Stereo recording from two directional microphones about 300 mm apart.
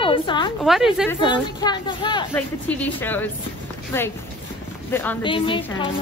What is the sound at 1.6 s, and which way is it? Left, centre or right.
A woman's voice, centre.